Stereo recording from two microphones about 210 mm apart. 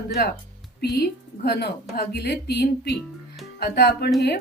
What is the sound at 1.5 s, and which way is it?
Speech, 50° left (ahead or behind).